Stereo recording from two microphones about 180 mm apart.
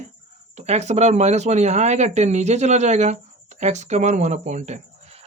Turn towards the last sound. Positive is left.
turn(degrees=-35)  # may be behind; listen again after turning